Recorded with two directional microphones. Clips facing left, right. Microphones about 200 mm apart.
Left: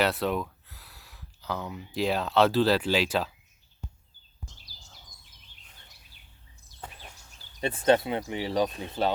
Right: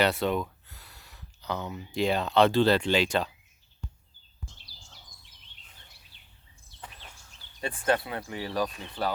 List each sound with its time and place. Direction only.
0.0 s speech: centre (ahead or behind)
7.9 s speech: 20° left (ahead or behind)